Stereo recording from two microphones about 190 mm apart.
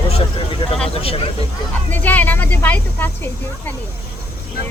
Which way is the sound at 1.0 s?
30° left (ahead or behind).